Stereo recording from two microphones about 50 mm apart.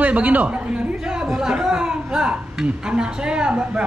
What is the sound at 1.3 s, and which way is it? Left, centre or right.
A woman's voice, centre.